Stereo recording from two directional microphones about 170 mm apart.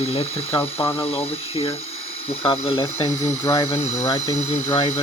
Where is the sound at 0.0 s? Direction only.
35° left (ahead or behind).